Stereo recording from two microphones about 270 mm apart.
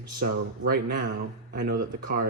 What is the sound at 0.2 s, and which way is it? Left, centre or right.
Speech, right.